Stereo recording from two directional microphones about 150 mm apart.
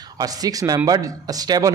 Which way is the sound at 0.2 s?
25° right (ahead or behind).